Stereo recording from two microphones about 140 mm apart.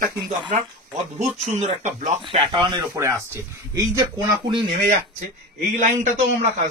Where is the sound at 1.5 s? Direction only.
55° right (ahead or behind).